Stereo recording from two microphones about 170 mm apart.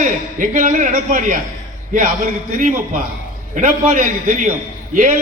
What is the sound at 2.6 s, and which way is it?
A man's voice, 50° right (ahead or behind).